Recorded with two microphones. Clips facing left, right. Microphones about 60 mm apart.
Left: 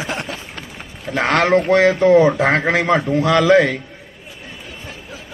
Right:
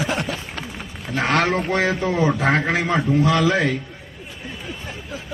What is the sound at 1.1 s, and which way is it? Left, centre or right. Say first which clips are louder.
A man's voice: left 5 dB; left.